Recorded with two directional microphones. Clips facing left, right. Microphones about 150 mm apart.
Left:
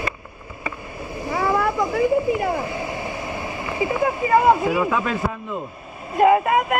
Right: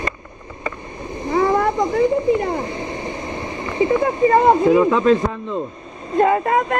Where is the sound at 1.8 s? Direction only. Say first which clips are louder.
Right 3 dB; 10° left (ahead or behind).